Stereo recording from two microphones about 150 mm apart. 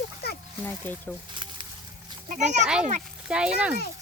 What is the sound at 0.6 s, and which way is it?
Speech, 10° left (ahead or behind).